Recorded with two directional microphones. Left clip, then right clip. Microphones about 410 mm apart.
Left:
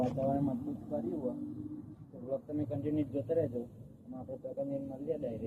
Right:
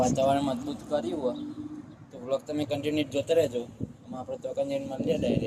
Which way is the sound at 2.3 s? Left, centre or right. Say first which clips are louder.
Right 8 dB; right.